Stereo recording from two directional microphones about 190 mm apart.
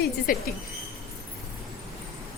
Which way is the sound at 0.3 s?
45° left (ahead or behind).